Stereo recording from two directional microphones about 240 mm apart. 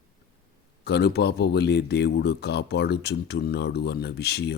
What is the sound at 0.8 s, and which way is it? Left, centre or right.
A man's voice, left.